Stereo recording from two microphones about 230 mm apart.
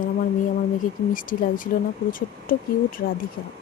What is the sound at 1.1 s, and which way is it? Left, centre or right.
Speech, left.